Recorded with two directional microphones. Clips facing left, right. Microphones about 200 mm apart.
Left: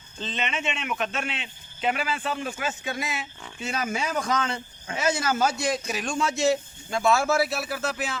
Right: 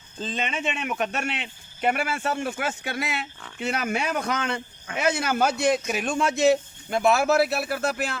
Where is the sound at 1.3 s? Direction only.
60° right (ahead or behind).